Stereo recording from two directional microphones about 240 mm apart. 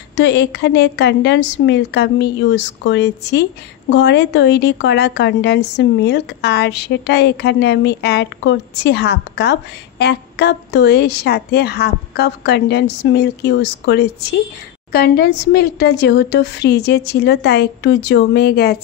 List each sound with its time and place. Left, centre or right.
0.1 s a woman's voice: left